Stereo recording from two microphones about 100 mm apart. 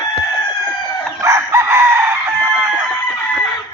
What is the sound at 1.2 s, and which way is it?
Chicken, 30° right (ahead or behind).